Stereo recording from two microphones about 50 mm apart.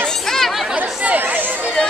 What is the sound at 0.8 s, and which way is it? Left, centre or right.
Chatter, right.